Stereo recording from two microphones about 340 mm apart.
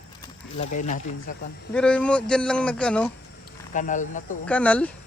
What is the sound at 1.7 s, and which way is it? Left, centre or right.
Speech, centre.